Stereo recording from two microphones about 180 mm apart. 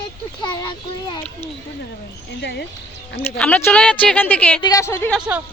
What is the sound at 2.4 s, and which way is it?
Speech, 70° left (ahead or behind).